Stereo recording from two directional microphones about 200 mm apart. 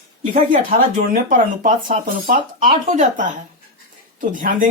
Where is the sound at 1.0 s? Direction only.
45° right (ahead or behind).